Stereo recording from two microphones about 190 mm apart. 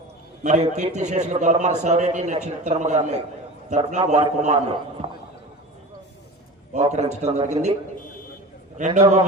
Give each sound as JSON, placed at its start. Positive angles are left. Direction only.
{"t": 0.4, "sound": "a man's voice", "side_deg": -40}
{"t": 6.7, "sound": "a man's voice", "side_deg": -35}